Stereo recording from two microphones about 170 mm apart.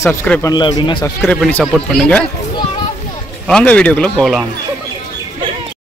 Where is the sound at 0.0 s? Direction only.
15° left (ahead or behind).